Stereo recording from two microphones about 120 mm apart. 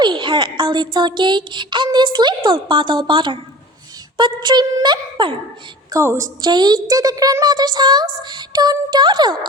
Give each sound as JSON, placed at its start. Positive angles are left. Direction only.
{"t": 0.0, "sound": "speech", "side_deg": -40}
{"t": 5.9, "sound": "a woman's voice", "side_deg": -25}
{"t": 6.4, "sound": "speech", "side_deg": -35}